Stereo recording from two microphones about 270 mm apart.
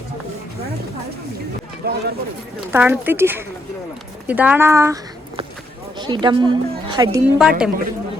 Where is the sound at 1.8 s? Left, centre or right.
Right.